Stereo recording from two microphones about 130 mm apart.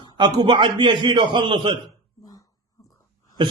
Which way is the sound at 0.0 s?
35° right (ahead or behind).